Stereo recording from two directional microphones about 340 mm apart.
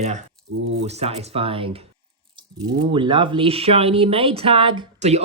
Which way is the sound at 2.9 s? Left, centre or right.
Centre.